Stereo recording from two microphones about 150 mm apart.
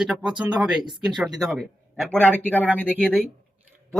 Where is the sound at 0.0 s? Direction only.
5° right (ahead or behind).